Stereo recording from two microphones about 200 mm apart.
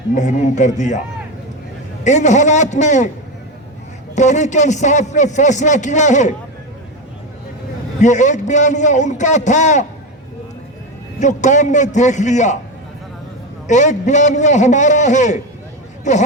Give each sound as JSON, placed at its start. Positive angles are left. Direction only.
{"t": 0.1, "sound": "a man's voice", "side_deg": 40}
{"t": 2.0, "sound": "a man's voice", "side_deg": 35}
{"t": 4.1, "sound": "a man's voice", "side_deg": 35}
{"t": 8.0, "sound": "a man's voice", "side_deg": 35}
{"t": 11.2, "sound": "a man's voice", "side_deg": 35}
{"t": 13.7, "sound": "a man's voice", "side_deg": 35}